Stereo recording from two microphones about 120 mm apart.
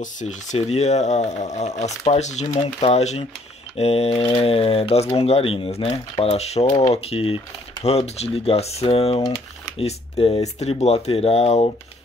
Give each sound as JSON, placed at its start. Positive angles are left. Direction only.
{"t": 0.0, "sound": "speech", "side_deg": 90}
{"t": 9.2, "sound": "a sound", "side_deg": 30}
{"t": 9.8, "sound": "speech", "side_deg": 55}